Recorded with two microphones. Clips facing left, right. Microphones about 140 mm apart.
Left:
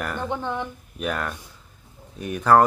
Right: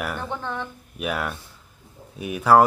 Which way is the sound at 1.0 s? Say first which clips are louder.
Even; 5° right (ahead or behind).